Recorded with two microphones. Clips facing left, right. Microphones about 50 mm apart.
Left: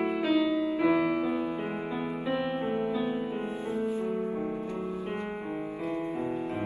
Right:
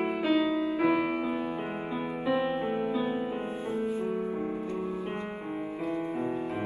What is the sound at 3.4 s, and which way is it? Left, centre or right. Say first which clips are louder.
Music: even; right.